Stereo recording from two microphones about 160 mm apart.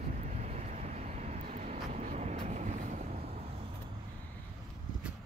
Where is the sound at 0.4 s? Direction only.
45° right (ahead or behind).